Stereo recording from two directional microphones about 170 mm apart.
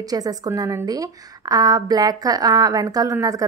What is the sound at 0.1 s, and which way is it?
A woman's voice, 20° right (ahead or behind).